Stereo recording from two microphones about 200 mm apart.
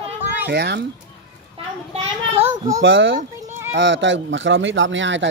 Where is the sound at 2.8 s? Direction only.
70° right (ahead or behind).